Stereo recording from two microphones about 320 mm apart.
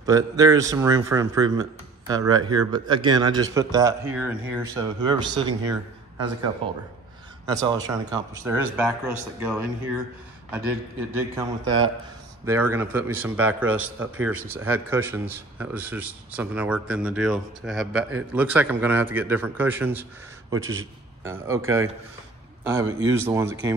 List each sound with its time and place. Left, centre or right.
0.0 s a man's voice: centre
11.1 s a man's voice: centre
21.2 s a man's voice: centre